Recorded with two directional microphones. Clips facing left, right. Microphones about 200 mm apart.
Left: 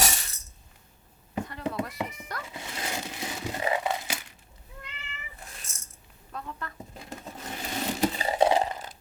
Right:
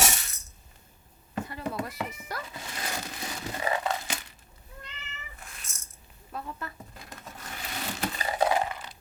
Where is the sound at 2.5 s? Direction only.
15° left (ahead or behind).